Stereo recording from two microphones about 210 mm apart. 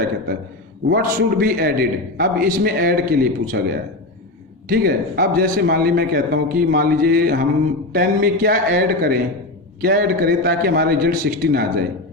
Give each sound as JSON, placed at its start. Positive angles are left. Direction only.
{"t": 0.9, "sound": "a man's voice", "side_deg": -45}